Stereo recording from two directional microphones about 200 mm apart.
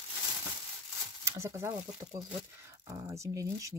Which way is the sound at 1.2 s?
15° right (ahead or behind).